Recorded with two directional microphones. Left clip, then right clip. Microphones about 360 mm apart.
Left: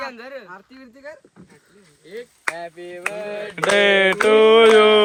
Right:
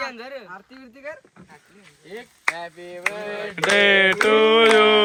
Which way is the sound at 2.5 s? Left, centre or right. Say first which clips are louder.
Left 2 dB; left.